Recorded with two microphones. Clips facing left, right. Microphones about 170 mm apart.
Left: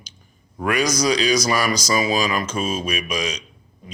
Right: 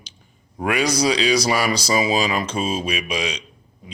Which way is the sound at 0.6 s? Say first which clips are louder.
Right 1 dB; 25° right (ahead or behind).